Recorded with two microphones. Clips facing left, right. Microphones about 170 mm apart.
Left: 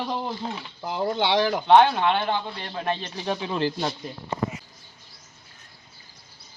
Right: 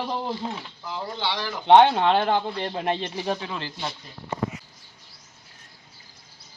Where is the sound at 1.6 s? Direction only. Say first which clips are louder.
Right 3 dB; 25° right (ahead or behind); by 2.6 s 40° right (ahead or behind).